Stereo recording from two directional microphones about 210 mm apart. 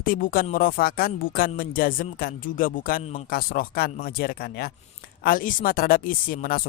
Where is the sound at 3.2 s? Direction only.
45° left (ahead or behind).